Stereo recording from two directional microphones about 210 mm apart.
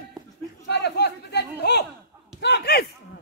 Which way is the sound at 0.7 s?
55° left (ahead or behind).